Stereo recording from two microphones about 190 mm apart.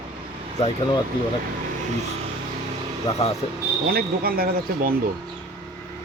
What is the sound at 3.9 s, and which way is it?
Speech, 50° right (ahead or behind).